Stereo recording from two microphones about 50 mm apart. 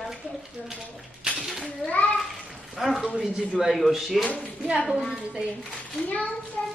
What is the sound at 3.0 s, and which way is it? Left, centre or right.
A man's voice, centre.